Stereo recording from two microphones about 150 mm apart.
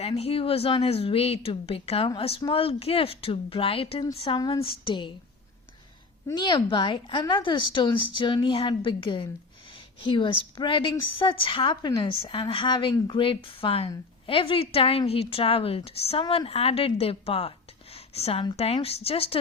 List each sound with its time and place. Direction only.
0.0 s a woman's voice: 40° left (ahead or behind)
6.3 s a woman's voice: 30° left (ahead or behind)
16.2 s a woman's voice: 30° left (ahead or behind)
16.5 s a woman's voice: 40° left (ahead or behind)
17.9 s a sound: 45° left (ahead or behind)
18.5 s a woman's voice: 40° left (ahead or behind)